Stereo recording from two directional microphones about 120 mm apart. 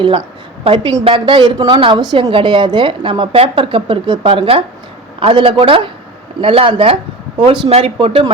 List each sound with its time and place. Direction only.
0.6 s a woman's voice: 45° right (ahead or behind)
7.7 s a woman's voice: 55° right (ahead or behind)